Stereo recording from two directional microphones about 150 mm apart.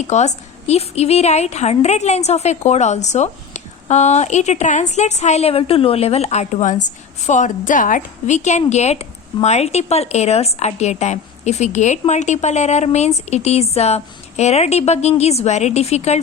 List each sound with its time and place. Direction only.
0.1 s a woman's voice: 50° left (ahead or behind)